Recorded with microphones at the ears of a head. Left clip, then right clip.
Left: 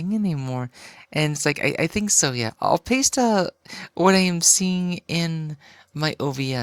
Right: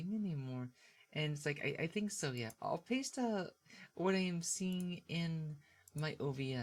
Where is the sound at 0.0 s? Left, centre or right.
Left.